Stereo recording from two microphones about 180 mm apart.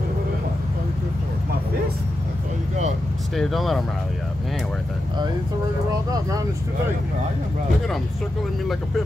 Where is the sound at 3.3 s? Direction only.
Centre (ahead or behind).